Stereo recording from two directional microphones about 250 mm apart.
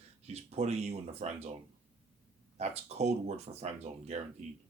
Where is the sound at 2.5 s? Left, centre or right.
Right.